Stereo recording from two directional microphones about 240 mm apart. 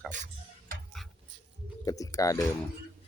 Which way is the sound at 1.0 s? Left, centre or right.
Centre.